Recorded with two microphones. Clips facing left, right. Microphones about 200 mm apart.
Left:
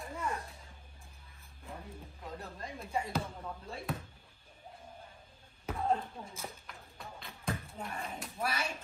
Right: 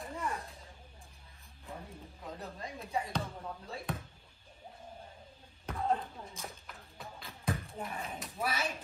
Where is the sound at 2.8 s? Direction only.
Centre (ahead or behind).